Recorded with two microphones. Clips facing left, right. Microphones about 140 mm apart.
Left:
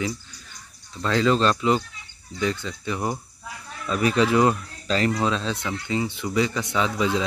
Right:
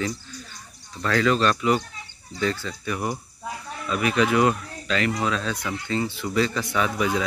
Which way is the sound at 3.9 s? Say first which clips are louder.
Left 1 dB; 35° left (ahead or behind).